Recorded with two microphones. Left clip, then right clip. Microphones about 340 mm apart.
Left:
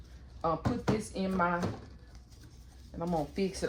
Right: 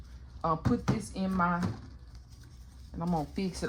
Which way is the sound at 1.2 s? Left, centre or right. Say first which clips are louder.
Right 2 dB; centre.